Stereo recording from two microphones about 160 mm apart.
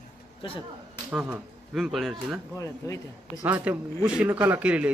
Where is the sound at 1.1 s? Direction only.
10° right (ahead or behind).